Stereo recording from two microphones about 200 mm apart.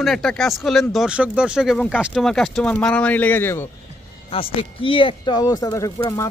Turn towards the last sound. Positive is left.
turn(degrees=15)  # may be behind; listen again after turning